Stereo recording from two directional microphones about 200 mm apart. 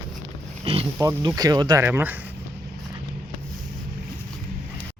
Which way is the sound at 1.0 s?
20° right (ahead or behind).